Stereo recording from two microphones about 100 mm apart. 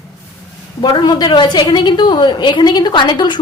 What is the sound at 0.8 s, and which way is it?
A woman's voice, 50° left (ahead or behind).